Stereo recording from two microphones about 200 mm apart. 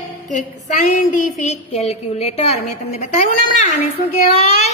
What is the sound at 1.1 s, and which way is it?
A woman's voice, 35° left (ahead or behind).